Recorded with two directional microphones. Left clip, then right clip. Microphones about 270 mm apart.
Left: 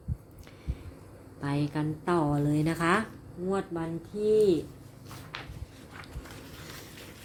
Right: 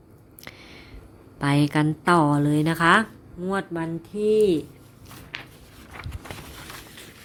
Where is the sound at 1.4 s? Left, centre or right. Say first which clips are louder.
Right 10 dB; right.